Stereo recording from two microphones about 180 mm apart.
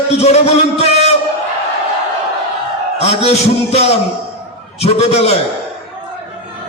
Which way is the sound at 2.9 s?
35° left (ahead or behind).